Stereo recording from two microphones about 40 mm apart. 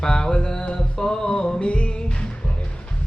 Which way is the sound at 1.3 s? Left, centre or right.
Left.